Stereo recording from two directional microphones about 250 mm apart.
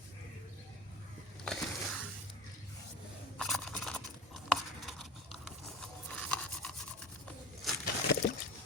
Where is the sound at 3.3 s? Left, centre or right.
Centre.